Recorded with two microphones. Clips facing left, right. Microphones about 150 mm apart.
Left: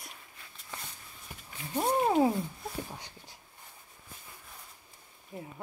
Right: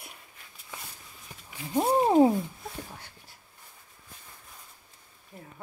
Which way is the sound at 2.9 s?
15° left (ahead or behind).